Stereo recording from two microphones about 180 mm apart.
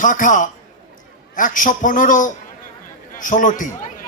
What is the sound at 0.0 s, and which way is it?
A man's voice, 45° left (ahead or behind).